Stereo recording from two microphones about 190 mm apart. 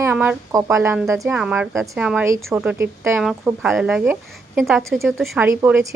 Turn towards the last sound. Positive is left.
turn(degrees=-10)  # may be behind; listen again after turning